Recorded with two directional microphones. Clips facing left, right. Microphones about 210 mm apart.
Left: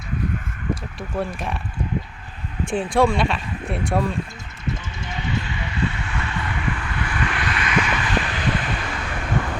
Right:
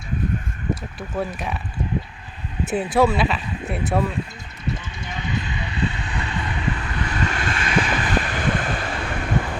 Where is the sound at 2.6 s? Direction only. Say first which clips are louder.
Even; 5° right (ahead or behind).